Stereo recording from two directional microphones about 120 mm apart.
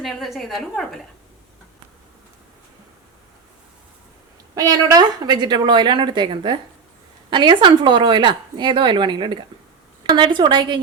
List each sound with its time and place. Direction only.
0.0 s a woman's voice: centre (ahead or behind)
4.5 s speech: 30° right (ahead or behind)